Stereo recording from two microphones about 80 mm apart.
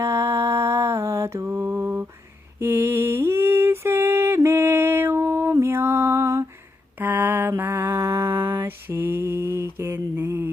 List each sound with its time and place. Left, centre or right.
0.0 s mantra: right
7.0 s a sound: right
7.5 s mantra: right